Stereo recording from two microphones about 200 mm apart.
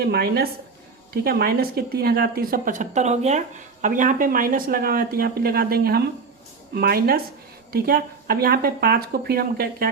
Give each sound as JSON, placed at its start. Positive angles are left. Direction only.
{"t": 0.0, "sound": "speech", "side_deg": -50}